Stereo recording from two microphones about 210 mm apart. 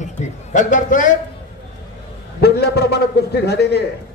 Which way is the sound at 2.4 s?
50° left (ahead or behind).